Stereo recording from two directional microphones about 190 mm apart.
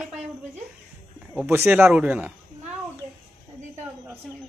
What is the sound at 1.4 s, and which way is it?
Speech, 10° right (ahead or behind).